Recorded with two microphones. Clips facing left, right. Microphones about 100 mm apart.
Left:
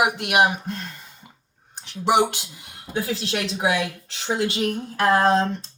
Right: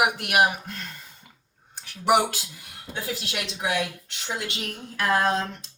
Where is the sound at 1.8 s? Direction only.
25° left (ahead or behind).